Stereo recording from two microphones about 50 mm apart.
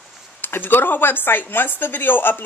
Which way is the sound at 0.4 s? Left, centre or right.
Left.